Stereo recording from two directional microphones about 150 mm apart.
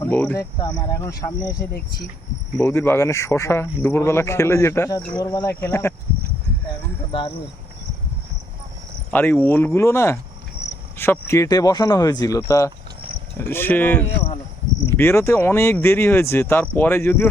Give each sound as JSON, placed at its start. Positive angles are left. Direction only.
{"t": 0.0, "sound": "speech", "side_deg": 10}
{"t": 0.6, "sound": "speech", "side_deg": 25}
{"t": 2.6, "sound": "speech", "side_deg": 15}
{"t": 9.1, "sound": "speech", "side_deg": 10}